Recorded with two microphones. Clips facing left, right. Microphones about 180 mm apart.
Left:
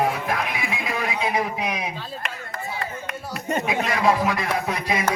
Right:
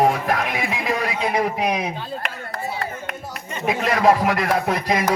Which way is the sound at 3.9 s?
40° right (ahead or behind).